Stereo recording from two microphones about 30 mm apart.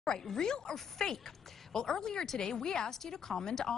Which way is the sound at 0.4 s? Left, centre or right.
Left.